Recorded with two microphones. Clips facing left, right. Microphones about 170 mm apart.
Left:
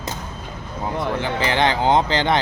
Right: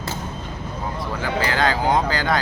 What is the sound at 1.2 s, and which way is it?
Speech, 20° left (ahead or behind).